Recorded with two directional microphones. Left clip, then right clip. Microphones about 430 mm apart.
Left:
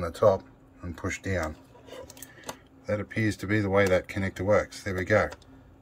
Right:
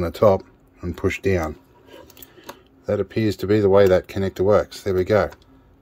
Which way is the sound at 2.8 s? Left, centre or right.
Centre.